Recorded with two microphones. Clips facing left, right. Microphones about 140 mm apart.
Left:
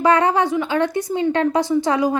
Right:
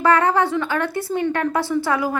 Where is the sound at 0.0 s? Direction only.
15° left (ahead or behind).